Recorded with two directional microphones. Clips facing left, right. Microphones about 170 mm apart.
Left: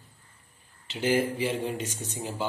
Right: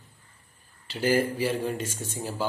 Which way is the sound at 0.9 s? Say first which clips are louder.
Right 1 dB; 20° left (ahead or behind).